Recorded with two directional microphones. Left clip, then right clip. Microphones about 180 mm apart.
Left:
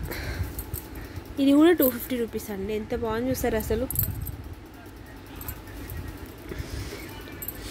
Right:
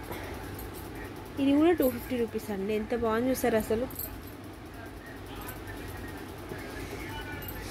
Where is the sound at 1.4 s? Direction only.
35° left (ahead or behind).